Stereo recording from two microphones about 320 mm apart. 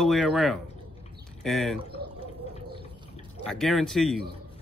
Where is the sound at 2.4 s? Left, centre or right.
Centre.